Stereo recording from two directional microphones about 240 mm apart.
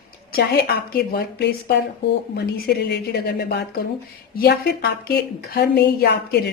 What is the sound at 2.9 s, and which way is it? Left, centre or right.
A woman's voice, left.